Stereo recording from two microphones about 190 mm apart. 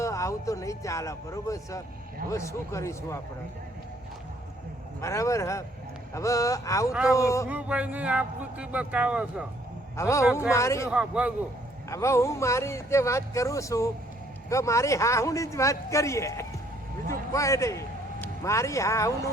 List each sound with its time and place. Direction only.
0.0 s speech: 15° left (ahead or behind)
4.9 s speech: 15° left (ahead or behind)
7.5 s speech: 5° right (ahead or behind)
10.0 s speech: 15° left (ahead or behind)
10.8 s speech: 5° right (ahead or behind)
11.9 s a man's voice: 15° left (ahead or behind)